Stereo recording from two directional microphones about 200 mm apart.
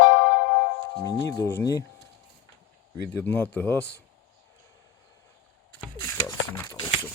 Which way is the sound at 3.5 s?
10° left (ahead or behind).